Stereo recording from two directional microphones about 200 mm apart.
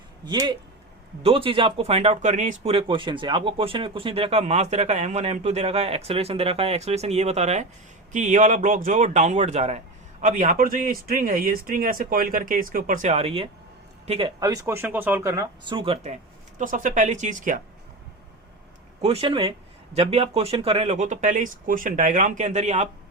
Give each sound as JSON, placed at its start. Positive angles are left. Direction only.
{"t": 0.3, "sound": "speech", "side_deg": -20}
{"t": 15.7, "sound": "speech", "side_deg": -30}
{"t": 16.6, "sound": "speech", "side_deg": -40}
{"t": 19.0, "sound": "speech", "side_deg": -30}